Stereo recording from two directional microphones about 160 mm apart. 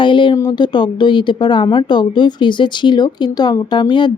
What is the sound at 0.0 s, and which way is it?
Speech, 30° left (ahead or behind).